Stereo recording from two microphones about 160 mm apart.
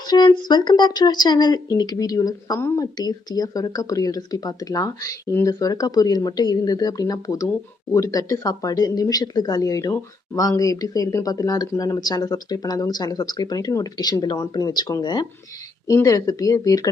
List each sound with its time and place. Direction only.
0.1 s speech: 25° left (ahead or behind)